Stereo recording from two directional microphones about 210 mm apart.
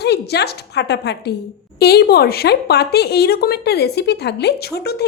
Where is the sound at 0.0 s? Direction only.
50° left (ahead or behind).